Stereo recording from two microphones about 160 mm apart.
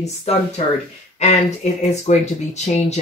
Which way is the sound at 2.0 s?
45° left (ahead or behind).